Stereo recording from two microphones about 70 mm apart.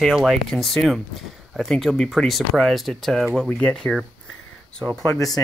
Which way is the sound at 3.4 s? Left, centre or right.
Centre.